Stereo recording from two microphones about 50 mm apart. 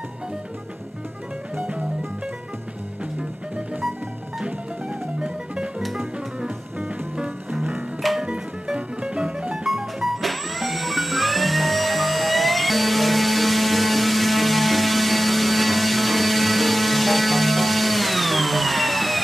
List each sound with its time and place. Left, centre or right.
4.5 s music: centre
5.8 s music: centre
8.2 s music: centre
9.7 s music: centre